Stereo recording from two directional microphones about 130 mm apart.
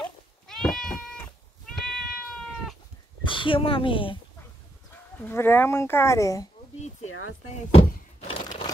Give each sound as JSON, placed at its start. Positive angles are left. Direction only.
{"t": 0.0, "sound": "cat", "side_deg": 5}
{"t": 3.3, "sound": "speech", "side_deg": 40}
{"t": 5.2, "sound": "speech", "side_deg": 15}
{"t": 7.5, "sound": "a sound", "side_deg": 50}